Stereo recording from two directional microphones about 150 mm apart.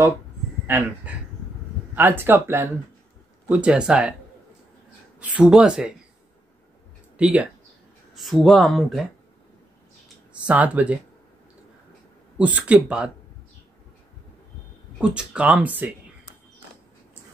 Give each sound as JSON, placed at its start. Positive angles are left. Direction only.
{"t": 0.7, "sound": "speech", "side_deg": -10}
{"t": 5.2, "sound": "speech", "side_deg": -10}
{"t": 7.2, "sound": "speech", "side_deg": -10}
{"t": 10.4, "sound": "speech", "side_deg": -10}
{"t": 12.4, "sound": "speech", "side_deg": -10}
{"t": 15.0, "sound": "speech", "side_deg": -5}